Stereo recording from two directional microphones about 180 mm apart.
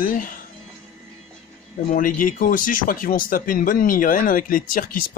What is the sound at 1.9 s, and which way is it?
Speech, 50° left (ahead or behind).